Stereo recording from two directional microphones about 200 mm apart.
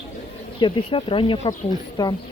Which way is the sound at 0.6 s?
25° left (ahead or behind).